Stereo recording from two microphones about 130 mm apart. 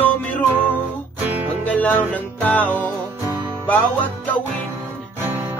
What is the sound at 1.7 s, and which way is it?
Music, 10° left (ahead or behind).